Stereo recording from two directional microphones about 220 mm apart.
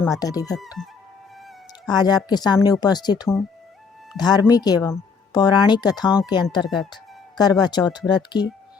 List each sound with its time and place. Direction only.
0.2 s speech: 15° left (ahead or behind)
0.8 s music: 5° right (ahead or behind)
1.9 s speech: 20° left (ahead or behind)